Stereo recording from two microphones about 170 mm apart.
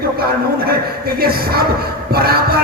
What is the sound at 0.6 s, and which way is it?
A man's voice, 65° right (ahead or behind).